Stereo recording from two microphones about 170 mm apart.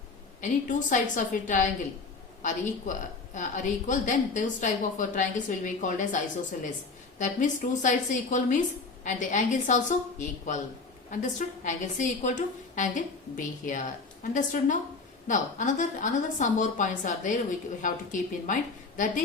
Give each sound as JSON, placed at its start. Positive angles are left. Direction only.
{"t": 0.4, "sound": "a woman's voice", "side_deg": 45}